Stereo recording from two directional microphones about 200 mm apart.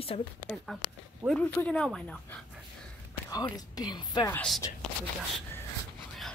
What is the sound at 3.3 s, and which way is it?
A woman's voice, 20° left (ahead or behind).